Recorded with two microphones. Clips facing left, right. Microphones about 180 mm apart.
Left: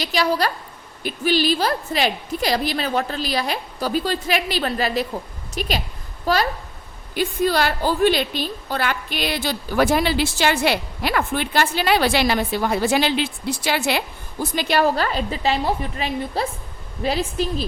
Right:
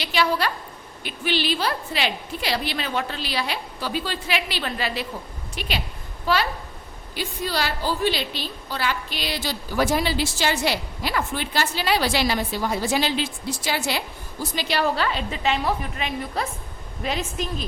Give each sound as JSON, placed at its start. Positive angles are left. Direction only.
{"t": 0.0, "sound": "a woman's voice", "side_deg": 40}